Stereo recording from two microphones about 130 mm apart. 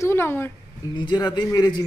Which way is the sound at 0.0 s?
20° left (ahead or behind).